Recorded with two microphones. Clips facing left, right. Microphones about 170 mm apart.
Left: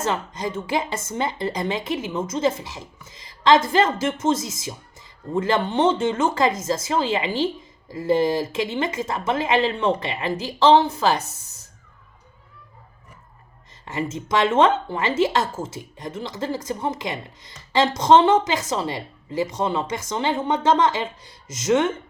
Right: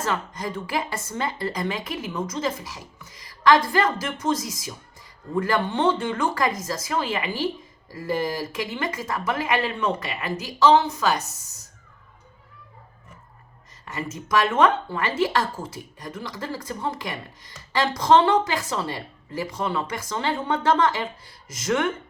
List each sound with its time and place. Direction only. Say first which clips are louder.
0.0 s a woman's voice: left 2 dB; 20° left (ahead or behind)
13.8 s a woman's voice: left 5 dB; 25° left (ahead or behind)